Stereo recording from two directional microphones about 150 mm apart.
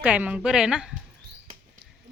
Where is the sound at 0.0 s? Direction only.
10° right (ahead or behind).